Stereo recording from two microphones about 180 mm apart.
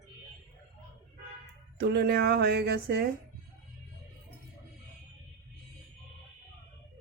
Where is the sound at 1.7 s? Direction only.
65° right (ahead or behind).